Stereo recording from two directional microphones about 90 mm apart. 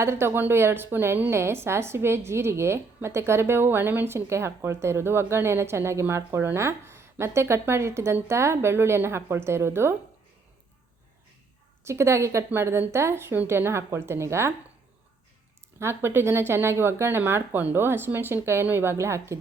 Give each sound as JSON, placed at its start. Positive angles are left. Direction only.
{"t": 0.0, "sound": "a woman's voice", "side_deg": -30}
{"t": 11.8, "sound": "a woman's voice", "side_deg": -30}
{"t": 15.8, "sound": "a woman's voice", "side_deg": -25}